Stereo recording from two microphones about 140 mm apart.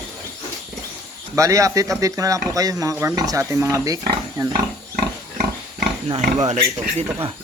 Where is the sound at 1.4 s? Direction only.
20° right (ahead or behind).